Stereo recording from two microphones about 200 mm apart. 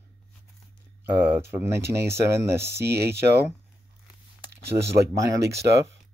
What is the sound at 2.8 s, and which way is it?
Speech, 55° right (ahead or behind).